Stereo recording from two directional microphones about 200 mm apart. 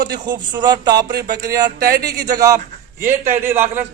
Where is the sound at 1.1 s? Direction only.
50° right (ahead or behind).